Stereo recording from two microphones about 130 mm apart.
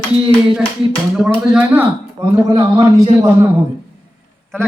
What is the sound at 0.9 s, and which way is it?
Speech, 5° right (ahead or behind).